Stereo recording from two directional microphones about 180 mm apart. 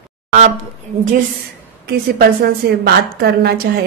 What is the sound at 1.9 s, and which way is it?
A woman's voice, 60° right (ahead or behind).